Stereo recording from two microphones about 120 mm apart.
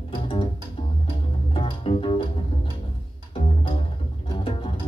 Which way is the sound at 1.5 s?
45° left (ahead or behind).